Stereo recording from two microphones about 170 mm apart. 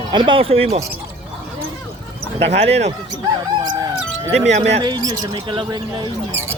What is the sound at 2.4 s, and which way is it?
Speech, 40° right (ahead or behind).